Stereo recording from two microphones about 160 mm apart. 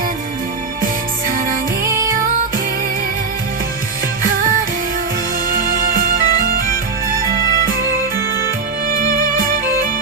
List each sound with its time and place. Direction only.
1.9 s music: 20° right (ahead or behind)
5.5 s music: 60° right (ahead or behind)
8.9 s music: 60° right (ahead or behind)